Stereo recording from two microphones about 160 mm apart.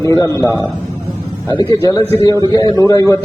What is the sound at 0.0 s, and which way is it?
A man's voice, 20° left (ahead or behind).